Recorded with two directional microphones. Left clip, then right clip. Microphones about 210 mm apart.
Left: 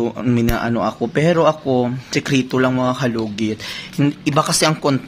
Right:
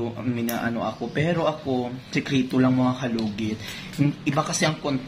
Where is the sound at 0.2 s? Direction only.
50° left (ahead or behind).